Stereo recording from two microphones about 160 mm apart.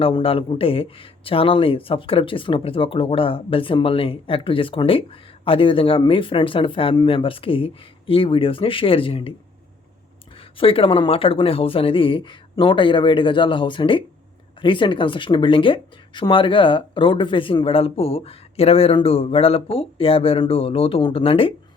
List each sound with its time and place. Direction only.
0.0 s speech: 35° left (ahead or behind)
10.6 s speech: 35° left (ahead or behind)